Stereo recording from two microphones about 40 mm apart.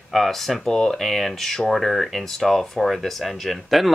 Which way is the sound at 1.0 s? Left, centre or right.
Centre.